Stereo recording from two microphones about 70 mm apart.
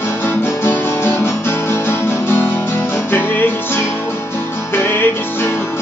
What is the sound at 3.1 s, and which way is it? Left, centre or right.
Music, left.